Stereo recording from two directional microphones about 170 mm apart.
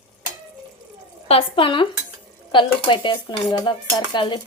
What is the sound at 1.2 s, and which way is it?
A woman's voice, 35° left (ahead or behind).